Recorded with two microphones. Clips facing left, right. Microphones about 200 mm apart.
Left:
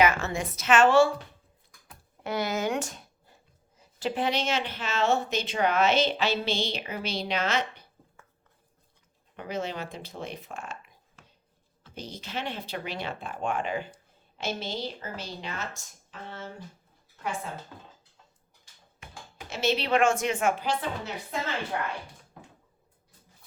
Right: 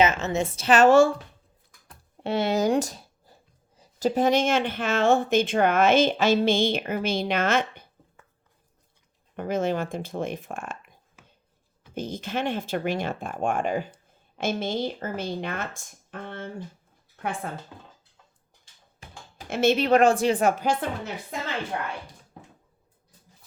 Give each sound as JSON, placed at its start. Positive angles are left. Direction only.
{"t": 0.0, "sound": "a woman's voice", "side_deg": -20}
{"t": 2.2, "sound": "speech", "side_deg": -30}
{"t": 9.3, "sound": "speech", "side_deg": -50}
{"t": 11.9, "sound": "speech", "side_deg": -50}
{"t": 17.7, "sound": "speech", "side_deg": -15}
{"t": 19.5, "sound": "speech", "side_deg": -50}